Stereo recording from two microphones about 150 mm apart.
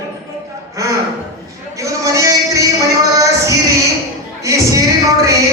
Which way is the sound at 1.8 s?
20° right (ahead or behind).